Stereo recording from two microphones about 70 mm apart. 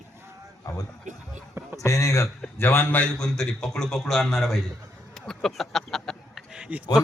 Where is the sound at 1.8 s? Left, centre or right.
Left.